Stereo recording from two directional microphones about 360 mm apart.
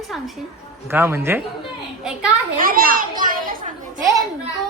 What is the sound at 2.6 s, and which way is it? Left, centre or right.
A child's voice, right.